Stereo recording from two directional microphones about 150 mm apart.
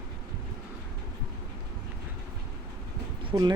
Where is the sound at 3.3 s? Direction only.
25° right (ahead or behind).